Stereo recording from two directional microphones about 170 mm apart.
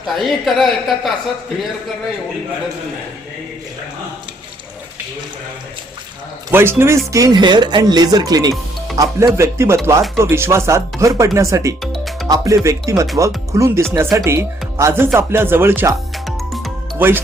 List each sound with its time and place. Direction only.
0.0 s a woman's voice: centre (ahead or behind)
6.5 s speech: 15° right (ahead or behind)
16.1 s music: centre (ahead or behind)
17.0 s speech: 15° right (ahead or behind)